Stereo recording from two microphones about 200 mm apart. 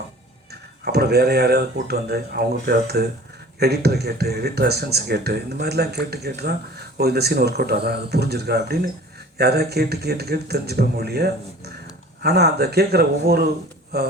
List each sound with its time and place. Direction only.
0.9 s speech: 55° right (ahead or behind)